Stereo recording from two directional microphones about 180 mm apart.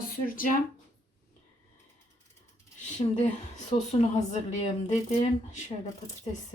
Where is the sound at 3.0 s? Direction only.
35° left (ahead or behind).